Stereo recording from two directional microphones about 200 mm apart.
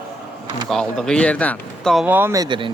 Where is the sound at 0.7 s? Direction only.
5° left (ahead or behind).